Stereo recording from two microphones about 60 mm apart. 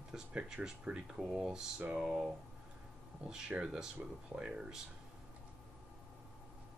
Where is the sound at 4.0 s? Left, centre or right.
Right.